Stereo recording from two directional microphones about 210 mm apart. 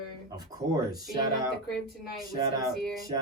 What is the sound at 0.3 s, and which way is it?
Speech, 20° right (ahead or behind).